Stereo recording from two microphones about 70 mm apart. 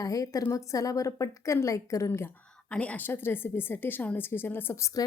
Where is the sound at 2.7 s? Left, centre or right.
Left.